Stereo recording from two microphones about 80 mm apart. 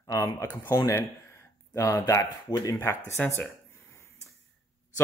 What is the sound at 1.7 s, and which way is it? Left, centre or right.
Speech, left.